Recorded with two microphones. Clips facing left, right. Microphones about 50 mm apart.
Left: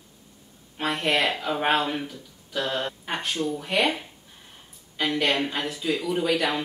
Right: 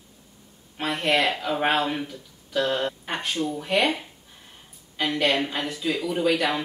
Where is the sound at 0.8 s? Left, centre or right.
Centre.